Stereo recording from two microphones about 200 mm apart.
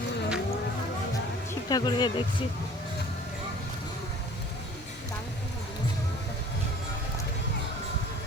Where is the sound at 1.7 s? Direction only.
20° left (ahead or behind).